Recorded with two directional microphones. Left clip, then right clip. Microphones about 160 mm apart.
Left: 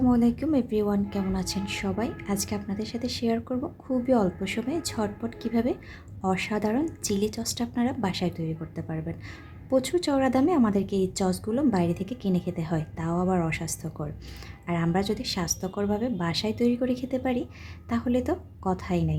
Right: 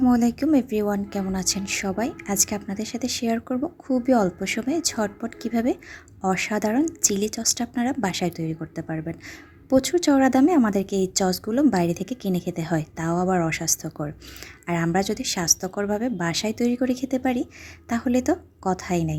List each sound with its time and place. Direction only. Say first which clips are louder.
0.0 s a woman's voice: right 3 dB; 20° right (ahead or behind)